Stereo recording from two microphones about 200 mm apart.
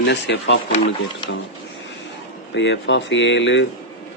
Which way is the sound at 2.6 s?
65° left (ahead or behind).